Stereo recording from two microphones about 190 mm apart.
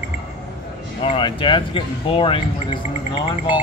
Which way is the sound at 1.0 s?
25° left (ahead or behind).